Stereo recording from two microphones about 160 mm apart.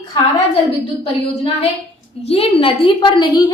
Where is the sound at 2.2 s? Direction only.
35° left (ahead or behind).